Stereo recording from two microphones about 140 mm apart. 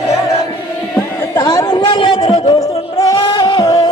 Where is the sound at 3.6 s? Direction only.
25° left (ahead or behind).